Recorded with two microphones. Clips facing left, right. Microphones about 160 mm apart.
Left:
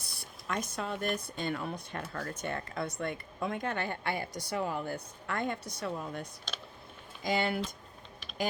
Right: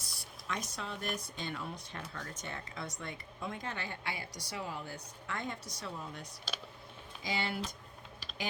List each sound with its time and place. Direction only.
0.0 s speech: 55° left (ahead or behind)
6.5 s a sound: 5° right (ahead or behind)
7.2 s speech: 50° left (ahead or behind)